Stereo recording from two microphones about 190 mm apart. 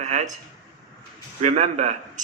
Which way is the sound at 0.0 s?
40° right (ahead or behind).